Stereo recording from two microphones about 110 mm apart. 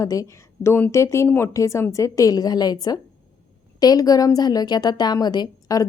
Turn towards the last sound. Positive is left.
turn(degrees=35)  # may be behind; listen again after turning